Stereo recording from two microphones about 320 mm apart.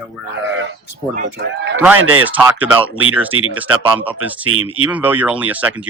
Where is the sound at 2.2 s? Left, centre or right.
Centre.